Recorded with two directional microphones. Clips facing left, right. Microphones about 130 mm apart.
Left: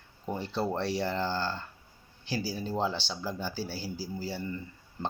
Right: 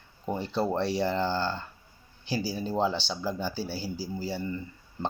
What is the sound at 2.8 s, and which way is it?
Speech, centre (ahead or behind).